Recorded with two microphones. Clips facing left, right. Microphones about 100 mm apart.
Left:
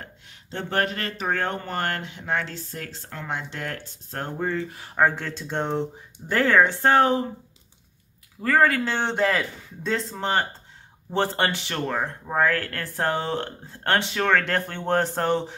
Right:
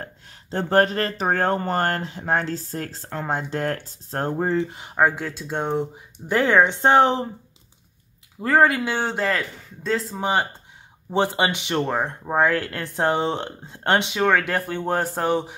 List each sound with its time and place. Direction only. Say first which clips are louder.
0.0 s speech: right 5 dB; 40° right (ahead or behind); by 7.2 s 25° right (ahead or behind)
8.4 s speech: right 2 dB; 20° right (ahead or behind)
8.9 s speech: even; 5° right (ahead or behind)
11.1 s speech: right 2 dB; 15° right (ahead or behind)